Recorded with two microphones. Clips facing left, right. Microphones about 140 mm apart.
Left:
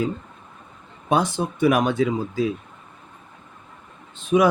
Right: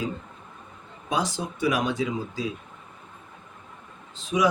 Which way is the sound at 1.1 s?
55° left (ahead or behind).